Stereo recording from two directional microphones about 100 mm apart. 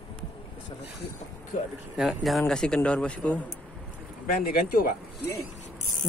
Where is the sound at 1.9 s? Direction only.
Centre (ahead or behind).